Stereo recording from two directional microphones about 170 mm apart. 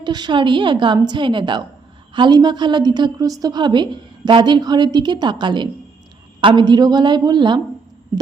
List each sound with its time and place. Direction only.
0.0 s a woman's voice: 25° right (ahead or behind)